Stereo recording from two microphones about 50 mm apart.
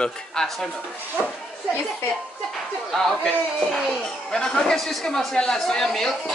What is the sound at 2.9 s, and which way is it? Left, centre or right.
Speech, centre.